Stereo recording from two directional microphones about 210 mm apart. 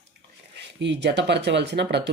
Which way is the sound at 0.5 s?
55° right (ahead or behind).